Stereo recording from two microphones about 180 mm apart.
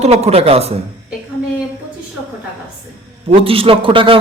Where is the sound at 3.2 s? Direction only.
30° right (ahead or behind).